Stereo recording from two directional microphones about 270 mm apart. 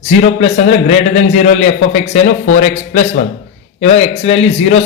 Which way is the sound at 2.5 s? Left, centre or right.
Left.